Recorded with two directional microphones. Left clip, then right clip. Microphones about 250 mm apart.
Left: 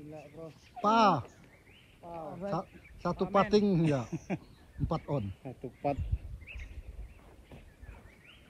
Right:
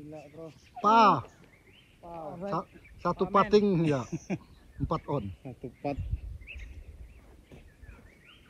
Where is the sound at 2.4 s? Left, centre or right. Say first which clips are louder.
Right 2 dB; right.